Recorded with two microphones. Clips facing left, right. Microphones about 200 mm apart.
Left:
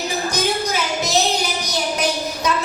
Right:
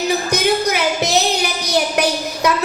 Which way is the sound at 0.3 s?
65° right (ahead or behind).